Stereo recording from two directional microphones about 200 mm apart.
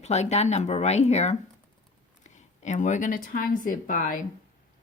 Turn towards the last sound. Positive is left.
turn(degrees=40)  # may be behind; listen again after turning